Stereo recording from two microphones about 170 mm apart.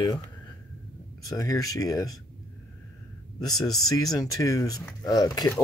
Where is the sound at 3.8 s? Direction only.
20° left (ahead or behind).